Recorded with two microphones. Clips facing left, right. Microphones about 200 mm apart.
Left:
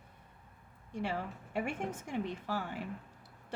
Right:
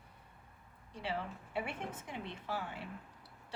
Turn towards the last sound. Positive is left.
turn(degrees=45)  # may be behind; listen again after turning